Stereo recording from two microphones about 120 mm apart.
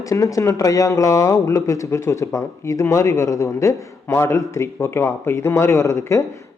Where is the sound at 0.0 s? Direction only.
30° left (ahead or behind).